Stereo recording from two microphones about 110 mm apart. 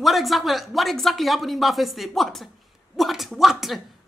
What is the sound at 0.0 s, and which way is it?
Speech, centre (ahead or behind).